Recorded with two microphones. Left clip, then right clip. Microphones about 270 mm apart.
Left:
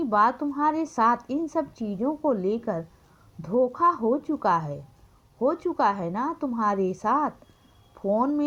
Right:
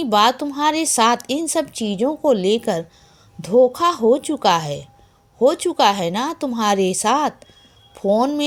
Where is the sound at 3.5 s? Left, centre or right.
Left.